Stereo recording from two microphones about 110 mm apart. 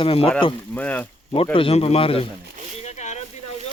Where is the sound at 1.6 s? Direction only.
60° left (ahead or behind).